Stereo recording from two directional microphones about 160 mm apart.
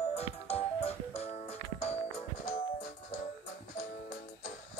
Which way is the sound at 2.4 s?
80° left.